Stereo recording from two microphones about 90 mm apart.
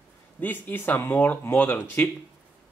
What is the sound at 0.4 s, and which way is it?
Speech, 20° left (ahead or behind).